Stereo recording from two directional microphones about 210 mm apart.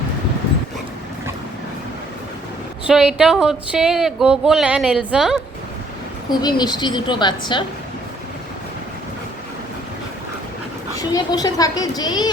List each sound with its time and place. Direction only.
2.8 s speech: 5° right (ahead or behind)
6.3 s a woman's voice: 20° left (ahead or behind)
11.1 s a woman's voice: 20° left (ahead or behind)